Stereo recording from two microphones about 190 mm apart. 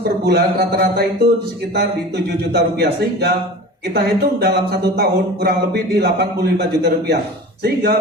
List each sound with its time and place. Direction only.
0.3 s speech: 55° right (ahead or behind)
2.5 s speech: 60° right (ahead or behind)